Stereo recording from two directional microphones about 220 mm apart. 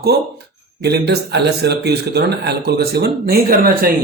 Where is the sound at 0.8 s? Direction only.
45° right (ahead or behind).